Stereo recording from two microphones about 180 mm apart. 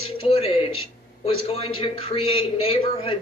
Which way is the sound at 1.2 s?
30° left (ahead or behind).